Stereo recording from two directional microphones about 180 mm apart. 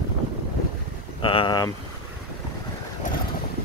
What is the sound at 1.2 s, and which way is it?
Speech, 25° left (ahead or behind).